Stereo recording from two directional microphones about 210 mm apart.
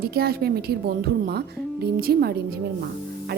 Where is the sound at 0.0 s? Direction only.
50° right (ahead or behind).